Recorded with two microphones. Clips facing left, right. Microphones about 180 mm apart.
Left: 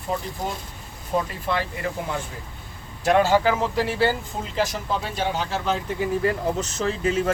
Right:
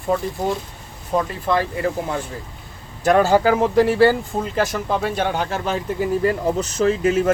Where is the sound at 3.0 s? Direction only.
45° right (ahead or behind).